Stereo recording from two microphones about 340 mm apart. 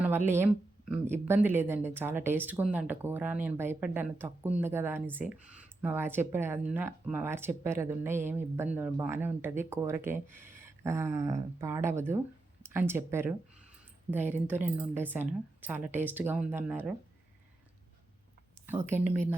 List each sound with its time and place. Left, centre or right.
0.3 s speech: centre
14.6 s speech: centre
18.6 s a woman's voice: centre